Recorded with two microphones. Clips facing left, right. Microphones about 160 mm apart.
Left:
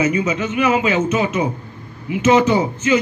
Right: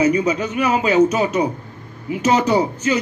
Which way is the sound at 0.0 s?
35° right (ahead or behind).